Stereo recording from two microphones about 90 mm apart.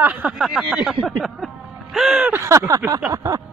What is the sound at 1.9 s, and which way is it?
Speech, 5° right (ahead or behind).